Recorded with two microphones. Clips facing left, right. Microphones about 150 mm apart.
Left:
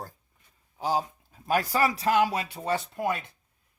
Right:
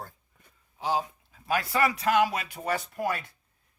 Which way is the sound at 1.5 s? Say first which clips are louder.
Left 1 dB; 40° left (ahead or behind).